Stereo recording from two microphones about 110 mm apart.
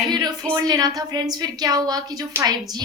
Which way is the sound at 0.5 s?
35° right (ahead or behind).